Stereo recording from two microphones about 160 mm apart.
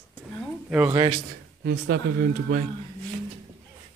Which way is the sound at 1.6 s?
90° right.